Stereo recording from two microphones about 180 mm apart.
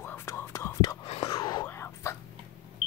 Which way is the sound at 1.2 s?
20° left (ahead or behind).